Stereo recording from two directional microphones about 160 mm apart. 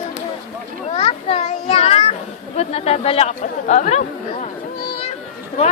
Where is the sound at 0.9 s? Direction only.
40° left (ahead or behind).